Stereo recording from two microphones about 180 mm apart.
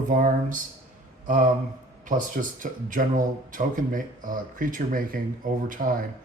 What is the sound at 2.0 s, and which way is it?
Speech, 50° right (ahead or behind).